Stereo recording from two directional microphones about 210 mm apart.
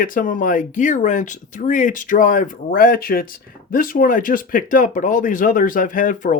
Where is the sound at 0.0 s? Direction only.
40° left (ahead or behind).